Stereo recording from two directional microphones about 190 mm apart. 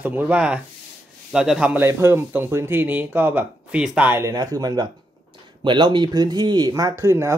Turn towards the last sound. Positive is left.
turn(degrees=-15)  # may be behind; listen again after turning